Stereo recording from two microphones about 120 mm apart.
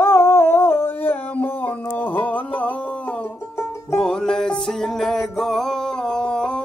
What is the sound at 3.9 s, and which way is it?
Music, 5° left (ahead or behind).